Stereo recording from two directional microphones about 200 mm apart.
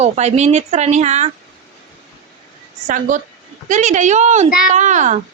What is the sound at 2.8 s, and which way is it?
A woman's voice, 40° right (ahead or behind).